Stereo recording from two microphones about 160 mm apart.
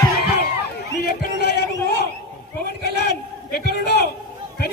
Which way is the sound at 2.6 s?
80° left.